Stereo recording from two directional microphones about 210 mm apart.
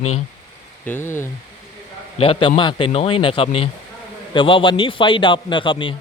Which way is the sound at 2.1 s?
25° left (ahead or behind).